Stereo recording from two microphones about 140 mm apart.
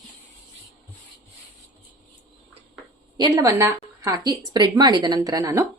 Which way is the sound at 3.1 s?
25° right (ahead or behind).